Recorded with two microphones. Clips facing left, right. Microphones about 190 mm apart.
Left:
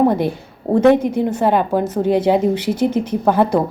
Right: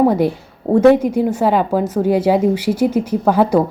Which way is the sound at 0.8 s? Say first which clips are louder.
Right 2 dB; 10° right (ahead or behind).